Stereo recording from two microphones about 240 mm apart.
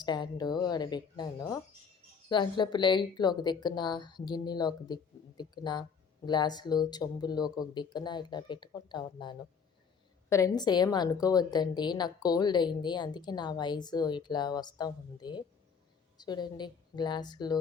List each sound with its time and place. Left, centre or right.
0.0 s a woman's voice: centre